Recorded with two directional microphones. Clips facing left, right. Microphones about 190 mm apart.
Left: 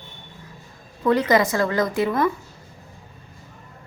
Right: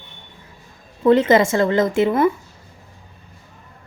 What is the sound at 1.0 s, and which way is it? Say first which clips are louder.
Speech: right 5 dB; 25° right (ahead or behind).